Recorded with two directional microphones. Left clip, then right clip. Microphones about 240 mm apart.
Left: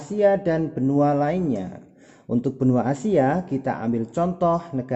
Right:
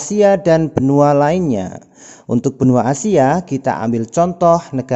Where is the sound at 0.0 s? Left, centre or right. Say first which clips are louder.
Right 7 dB; right.